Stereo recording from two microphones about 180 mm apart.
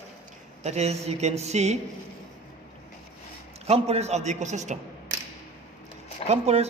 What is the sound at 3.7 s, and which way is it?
Speech, 35° right (ahead or behind).